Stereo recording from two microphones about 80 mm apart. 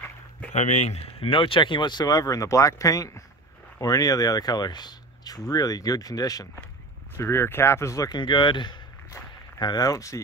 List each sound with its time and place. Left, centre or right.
1.2 s speech: left
7.2 s speech: left
8.1 s speech: left
9.6 s speech: left